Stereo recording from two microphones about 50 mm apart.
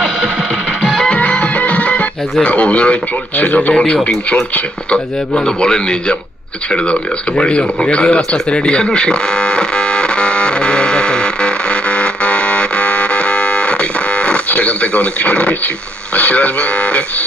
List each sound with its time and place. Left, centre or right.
0.9 s music: centre
2.4 s speech: left
3.4 s a man's voice: left
3.8 s speech: left
6.7 s a sound: left
16.1 s speech: left